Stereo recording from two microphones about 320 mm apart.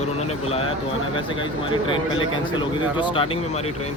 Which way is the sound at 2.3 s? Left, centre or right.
Centre.